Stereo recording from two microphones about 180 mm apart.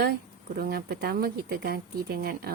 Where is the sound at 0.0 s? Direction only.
55° right (ahead or behind).